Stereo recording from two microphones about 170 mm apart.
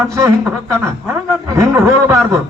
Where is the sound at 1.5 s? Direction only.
15° right (ahead or behind).